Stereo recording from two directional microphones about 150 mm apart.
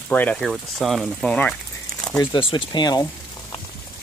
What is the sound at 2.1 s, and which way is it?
Speech, 30° left (ahead or behind).